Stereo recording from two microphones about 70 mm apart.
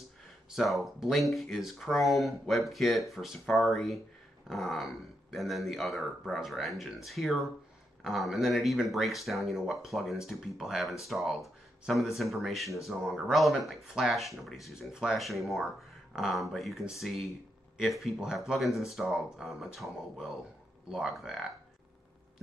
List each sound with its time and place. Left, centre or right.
0.5 s speech: centre